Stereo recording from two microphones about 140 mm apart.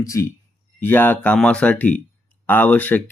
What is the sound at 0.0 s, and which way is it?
Speech, 20° left (ahead or behind).